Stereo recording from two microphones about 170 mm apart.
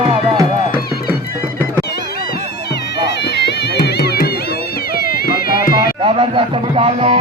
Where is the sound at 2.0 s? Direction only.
70° left (ahead or behind).